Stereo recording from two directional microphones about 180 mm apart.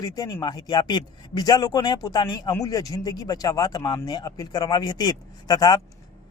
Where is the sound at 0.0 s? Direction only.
20° left (ahead or behind).